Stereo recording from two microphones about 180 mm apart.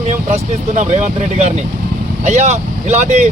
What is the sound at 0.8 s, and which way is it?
Speech, 40° right (ahead or behind).